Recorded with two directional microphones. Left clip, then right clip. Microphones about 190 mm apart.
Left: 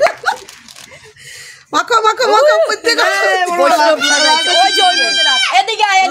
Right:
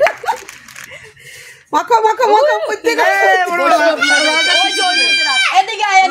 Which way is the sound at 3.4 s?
45° left (ahead or behind).